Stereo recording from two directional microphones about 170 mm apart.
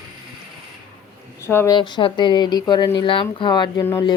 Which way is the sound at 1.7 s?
30° left (ahead or behind).